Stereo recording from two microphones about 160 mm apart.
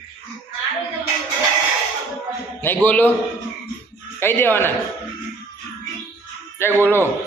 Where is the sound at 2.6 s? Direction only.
10° left (ahead or behind).